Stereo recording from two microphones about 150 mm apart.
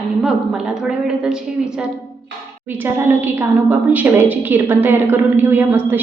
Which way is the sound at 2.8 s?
15° right (ahead or behind).